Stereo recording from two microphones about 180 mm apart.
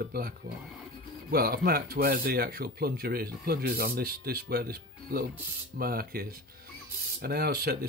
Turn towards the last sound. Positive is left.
turn(degrees=-55)  # may be behind; listen again after turning